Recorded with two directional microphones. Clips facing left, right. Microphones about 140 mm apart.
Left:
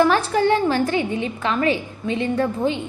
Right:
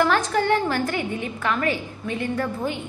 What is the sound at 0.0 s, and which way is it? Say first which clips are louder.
A woman's voice: left 4 dB; 15° left (ahead or behind).